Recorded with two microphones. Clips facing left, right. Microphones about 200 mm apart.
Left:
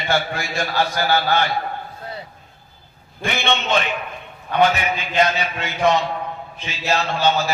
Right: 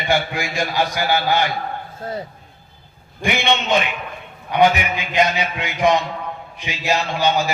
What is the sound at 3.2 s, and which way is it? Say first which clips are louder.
A man's voice: right 2 dB; 15° right (ahead or behind).